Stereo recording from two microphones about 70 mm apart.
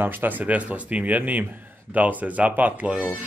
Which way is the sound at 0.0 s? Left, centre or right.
Right.